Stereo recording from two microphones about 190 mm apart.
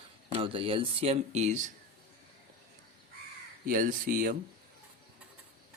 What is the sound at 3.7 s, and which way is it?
Speech, 45° right (ahead or behind).